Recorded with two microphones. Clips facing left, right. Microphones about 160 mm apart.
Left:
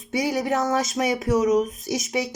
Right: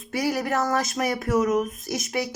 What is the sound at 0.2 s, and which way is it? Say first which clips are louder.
Speech: left 1 dB; 20° left (ahead or behind).